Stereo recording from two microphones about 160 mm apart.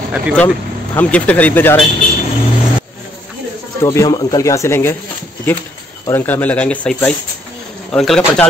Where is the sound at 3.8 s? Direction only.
20° left (ahead or behind).